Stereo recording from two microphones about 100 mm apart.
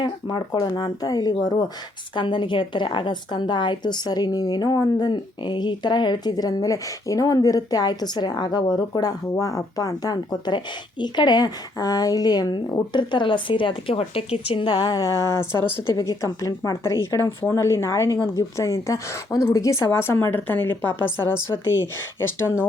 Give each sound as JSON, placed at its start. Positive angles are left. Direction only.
{"t": 0.0, "sound": "a woman's voice", "side_deg": 50}
{"t": 2.1, "sound": "a woman's voice", "side_deg": 55}
{"t": 14.8, "sound": "a woman's voice", "side_deg": 40}
{"t": 19.9, "sound": "a woman's voice", "side_deg": 20}
{"t": 22.2, "sound": "a woman's voice", "side_deg": 25}